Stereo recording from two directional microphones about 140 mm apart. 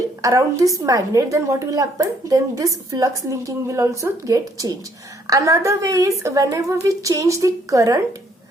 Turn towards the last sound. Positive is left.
turn(degrees=-25)  # may be behind; listen again after turning